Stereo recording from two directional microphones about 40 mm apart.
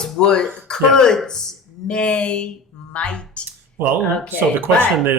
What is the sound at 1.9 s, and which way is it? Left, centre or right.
Speech, left.